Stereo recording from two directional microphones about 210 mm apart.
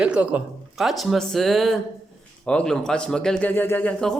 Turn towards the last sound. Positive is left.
turn(degrees=5)  # may be behind; listen again after turning